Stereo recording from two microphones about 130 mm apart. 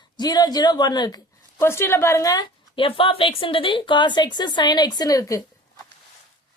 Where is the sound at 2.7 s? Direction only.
40° left (ahead or behind); by 5.4 s 25° left (ahead or behind).